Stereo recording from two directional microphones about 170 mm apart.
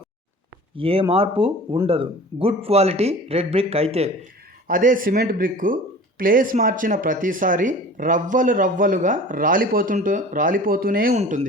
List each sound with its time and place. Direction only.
0.8 s speech: 35° right (ahead or behind)
4.7 s speech: 50° right (ahead or behind)
11.2 s speech: 40° right (ahead or behind)